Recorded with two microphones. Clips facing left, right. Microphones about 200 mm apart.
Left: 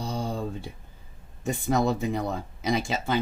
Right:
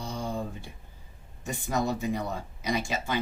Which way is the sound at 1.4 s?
55° left (ahead or behind).